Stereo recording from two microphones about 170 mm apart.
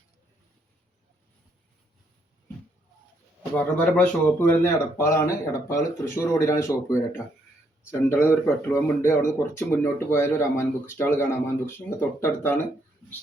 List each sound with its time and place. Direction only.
3.8 s speech: 10° left (ahead or behind)